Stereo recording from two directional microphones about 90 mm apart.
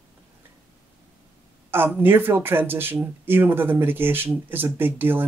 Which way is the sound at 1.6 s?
25° right (ahead or behind).